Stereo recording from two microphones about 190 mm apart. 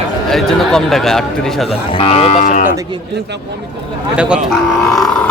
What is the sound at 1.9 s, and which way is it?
Speech, 30° left (ahead or behind).